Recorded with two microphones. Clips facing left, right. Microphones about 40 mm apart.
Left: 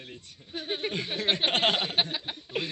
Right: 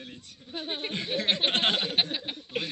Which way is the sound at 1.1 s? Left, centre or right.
Left.